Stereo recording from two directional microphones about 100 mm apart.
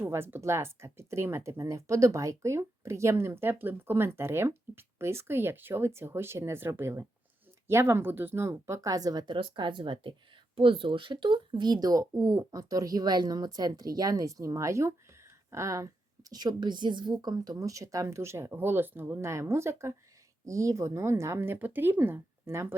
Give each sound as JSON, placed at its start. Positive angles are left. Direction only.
{"t": 0.0, "sound": "a woman's voice", "side_deg": -25}